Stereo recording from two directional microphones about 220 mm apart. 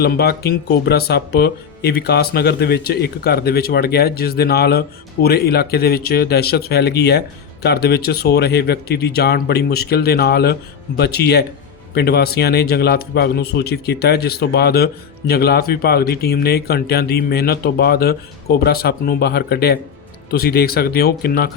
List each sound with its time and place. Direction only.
0.0 s speech: 45° left (ahead or behind)